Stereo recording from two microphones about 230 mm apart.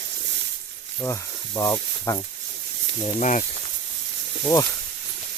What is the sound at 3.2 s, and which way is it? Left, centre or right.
Speech, left.